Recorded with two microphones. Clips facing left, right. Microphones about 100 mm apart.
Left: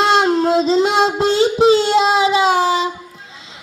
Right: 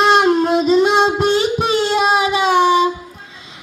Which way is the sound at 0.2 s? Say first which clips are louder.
Even; 30° left (ahead or behind).